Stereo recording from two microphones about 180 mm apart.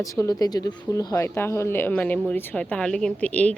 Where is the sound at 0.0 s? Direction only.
20° left (ahead or behind).